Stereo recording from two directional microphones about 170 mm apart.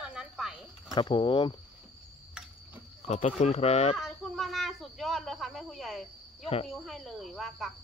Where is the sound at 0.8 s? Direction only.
25° left (ahead or behind).